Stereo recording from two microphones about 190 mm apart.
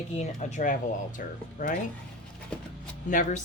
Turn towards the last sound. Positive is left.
turn(degrees=40)  # may be behind; listen again after turning